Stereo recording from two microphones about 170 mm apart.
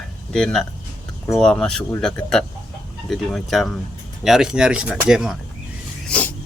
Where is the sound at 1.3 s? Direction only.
5° left (ahead or behind).